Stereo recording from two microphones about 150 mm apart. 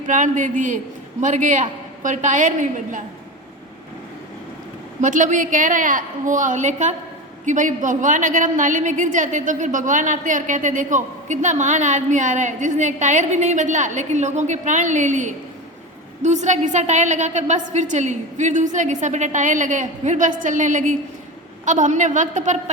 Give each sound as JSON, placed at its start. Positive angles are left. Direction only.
{"t": 0.1, "sound": "a woman's voice", "side_deg": -60}
{"t": 4.9, "sound": "a woman's voice", "side_deg": -55}